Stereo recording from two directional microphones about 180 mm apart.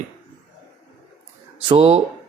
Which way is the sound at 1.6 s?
30° right (ahead or behind).